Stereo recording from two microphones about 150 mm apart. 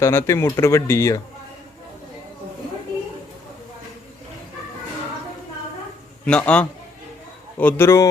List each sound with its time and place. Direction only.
0.0 s speech: 15° left (ahead or behind)
6.2 s speech: 5° left (ahead or behind)